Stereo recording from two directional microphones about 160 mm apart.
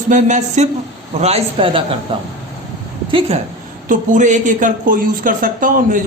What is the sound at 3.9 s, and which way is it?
Speech, 50° right (ahead or behind).